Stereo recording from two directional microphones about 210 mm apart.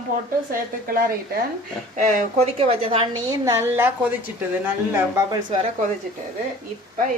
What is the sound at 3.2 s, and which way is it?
A woman's voice, 15° right (ahead or behind).